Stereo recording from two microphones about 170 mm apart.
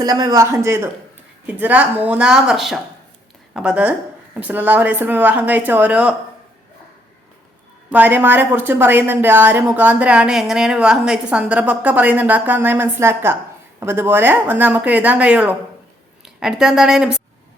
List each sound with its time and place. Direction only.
0.0 s speech: 20° right (ahead or behind); by 6.1 s 5° right (ahead or behind)
7.9 s a woman's voice: 10° right (ahead or behind)